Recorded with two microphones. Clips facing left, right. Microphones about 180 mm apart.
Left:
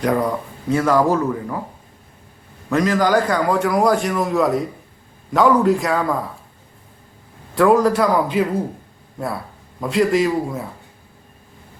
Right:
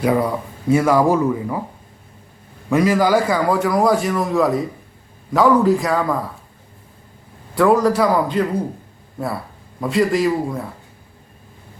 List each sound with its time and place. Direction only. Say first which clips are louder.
0.0 s speech: right 1 dB; 5° right (ahead or behind)
2.6 s a man's voice: right 2 dB; 10° right (ahead or behind)
7.5 s a man's voice: even; centre (ahead or behind)